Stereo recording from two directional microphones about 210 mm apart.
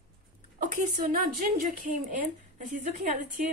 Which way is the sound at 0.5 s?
40° right (ahead or behind).